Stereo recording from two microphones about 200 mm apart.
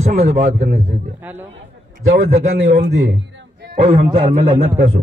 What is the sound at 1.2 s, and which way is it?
Speech, 10° right (ahead or behind).